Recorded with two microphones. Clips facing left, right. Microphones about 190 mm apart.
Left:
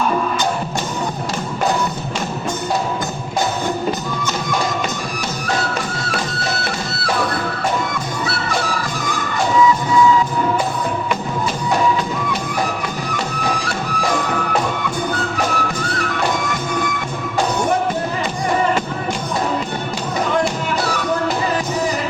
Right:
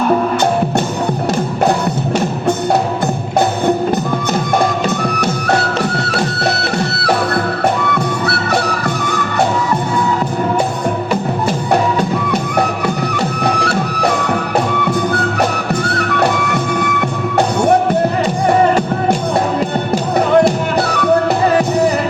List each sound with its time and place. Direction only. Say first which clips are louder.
5.1 s music: right 7 dB; 65° right (ahead or behind)
13.4 s music: right 8 dB; 65° right (ahead or behind)
16.5 s music: right 5 dB; 65° right (ahead or behind)